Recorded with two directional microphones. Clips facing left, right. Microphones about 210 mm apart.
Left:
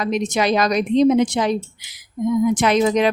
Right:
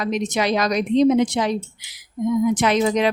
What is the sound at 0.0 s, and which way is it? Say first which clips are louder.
Speech: left 2 dB; 50° left (ahead or behind).